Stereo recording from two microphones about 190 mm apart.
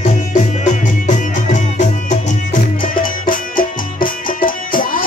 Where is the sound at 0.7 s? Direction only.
40° left (ahead or behind).